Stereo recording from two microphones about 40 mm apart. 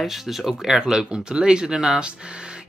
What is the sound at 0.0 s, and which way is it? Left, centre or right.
Speech, centre.